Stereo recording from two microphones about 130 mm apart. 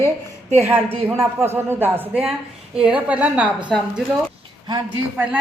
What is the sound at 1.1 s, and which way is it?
A man's voice, 20° right (ahead or behind).